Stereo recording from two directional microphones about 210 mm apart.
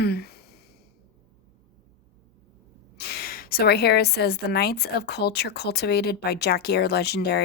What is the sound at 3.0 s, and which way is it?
A woman's voice, 50° left (ahead or behind).